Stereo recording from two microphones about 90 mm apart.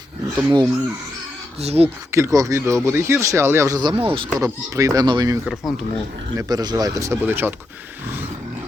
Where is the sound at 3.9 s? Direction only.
85° right.